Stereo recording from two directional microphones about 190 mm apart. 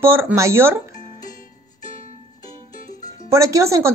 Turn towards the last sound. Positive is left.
turn(degrees=-15)  # may be behind; listen again after turning